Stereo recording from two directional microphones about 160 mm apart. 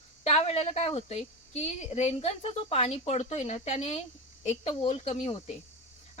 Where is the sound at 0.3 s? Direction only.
40° left (ahead or behind).